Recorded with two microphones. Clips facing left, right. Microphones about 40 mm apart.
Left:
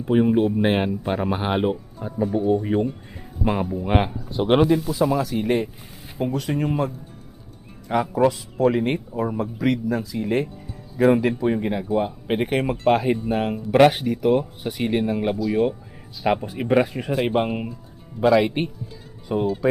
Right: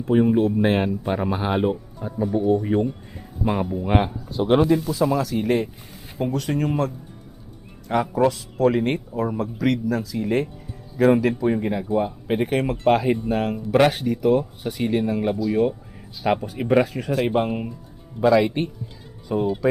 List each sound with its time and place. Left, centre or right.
0.0 s speech: centre
4.6 s speech: centre